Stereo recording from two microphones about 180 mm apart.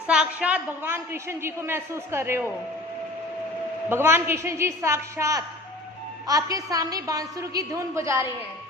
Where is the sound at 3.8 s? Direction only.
15° right (ahead or behind).